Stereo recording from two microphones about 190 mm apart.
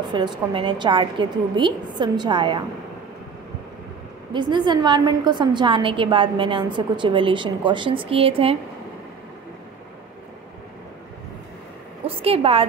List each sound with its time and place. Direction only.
0.1 s a woman's voice: 25° right (ahead or behind)
4.3 s a woman's voice: 25° right (ahead or behind)
12.1 s a woman's voice: 30° right (ahead or behind)